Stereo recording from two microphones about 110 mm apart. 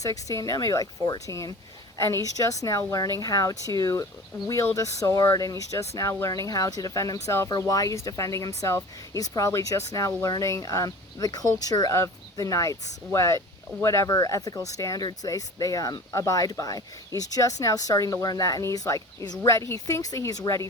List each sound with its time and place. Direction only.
0.0 s speech: 30° left (ahead or behind)